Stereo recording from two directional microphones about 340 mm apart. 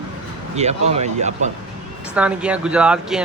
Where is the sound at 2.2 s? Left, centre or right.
Centre.